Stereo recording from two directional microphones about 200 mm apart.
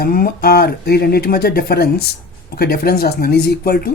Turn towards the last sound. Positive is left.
turn(degrees=50)  # may be behind; listen again after turning